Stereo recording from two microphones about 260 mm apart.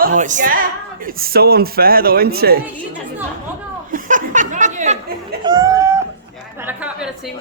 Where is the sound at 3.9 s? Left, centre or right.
Right.